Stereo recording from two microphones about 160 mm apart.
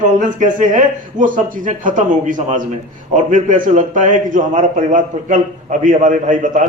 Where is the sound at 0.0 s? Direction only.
50° right (ahead or behind).